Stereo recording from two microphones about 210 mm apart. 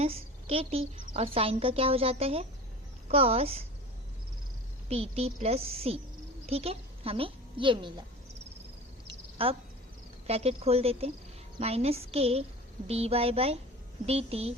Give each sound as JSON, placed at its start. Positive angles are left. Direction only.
{"t": 0.0, "sound": "a woman's voice", "side_deg": -30}
{"t": 4.9, "sound": "a woman's voice", "side_deg": -30}
{"t": 9.0, "sound": "cricket", "side_deg": -25}
{"t": 10.2, "sound": "a woman's voice", "side_deg": -30}